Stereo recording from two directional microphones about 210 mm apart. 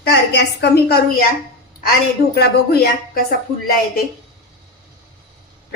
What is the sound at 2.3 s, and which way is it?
Speech, 50° left (ahead or behind).